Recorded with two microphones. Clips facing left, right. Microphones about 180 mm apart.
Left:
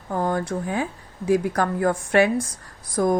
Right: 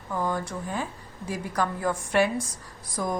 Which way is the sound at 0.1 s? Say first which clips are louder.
Left 5 dB; 50° left (ahead or behind).